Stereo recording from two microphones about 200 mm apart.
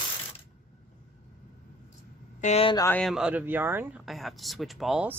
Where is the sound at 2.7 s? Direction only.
15° left (ahead or behind).